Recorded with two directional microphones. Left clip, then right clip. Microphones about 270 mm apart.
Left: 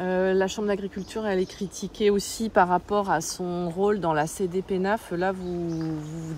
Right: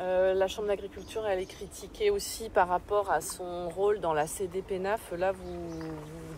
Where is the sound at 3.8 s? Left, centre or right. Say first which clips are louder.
Left 4 dB; left.